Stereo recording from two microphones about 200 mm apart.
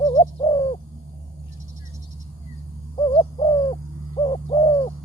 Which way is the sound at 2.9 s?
25° left (ahead or behind).